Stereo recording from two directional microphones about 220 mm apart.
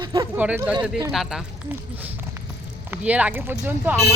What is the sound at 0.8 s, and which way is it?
Speech, 20° right (ahead or behind).